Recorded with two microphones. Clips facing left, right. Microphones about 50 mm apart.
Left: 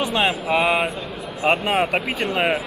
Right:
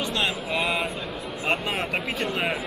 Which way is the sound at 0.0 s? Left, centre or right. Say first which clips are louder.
Left 6 dB; centre.